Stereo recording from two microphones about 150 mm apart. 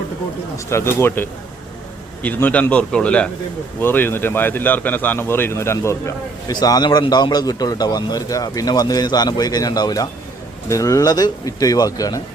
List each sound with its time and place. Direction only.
0.5 s a man's voice: 20° left (ahead or behind)